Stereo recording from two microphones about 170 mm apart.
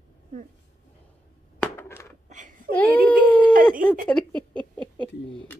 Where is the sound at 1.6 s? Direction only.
15° left (ahead or behind).